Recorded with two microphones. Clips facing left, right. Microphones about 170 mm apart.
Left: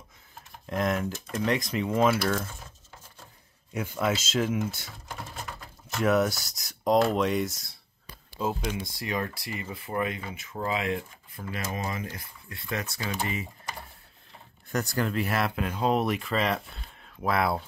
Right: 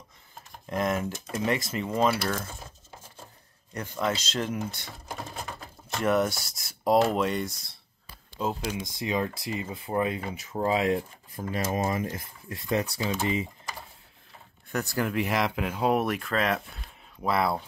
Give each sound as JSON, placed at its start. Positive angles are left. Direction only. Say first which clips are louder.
{"t": 0.7, "sound": "speech", "louder": "even", "side_deg": 0}
{"t": 3.7, "sound": "speech", "louder": "left 1 dB", "side_deg": 5}
{"t": 4.8, "sound": "a sound", "louder": "right 2 dB", "side_deg": -25}
{"t": 5.9, "sound": "speech", "louder": "left 1 dB", "side_deg": 0}
{"t": 8.8, "sound": "speech", "louder": "right 3 dB", "side_deg": -20}
{"t": 11.9, "sound": "speech", "louder": "right 5 dB", "side_deg": -45}
{"t": 14.7, "sound": "speech", "louder": "even", "side_deg": 0}